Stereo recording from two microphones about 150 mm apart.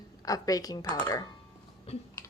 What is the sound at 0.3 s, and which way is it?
Speech, 25° left (ahead or behind).